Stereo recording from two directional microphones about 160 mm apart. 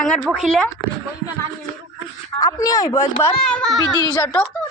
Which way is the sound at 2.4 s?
25° left (ahead or behind).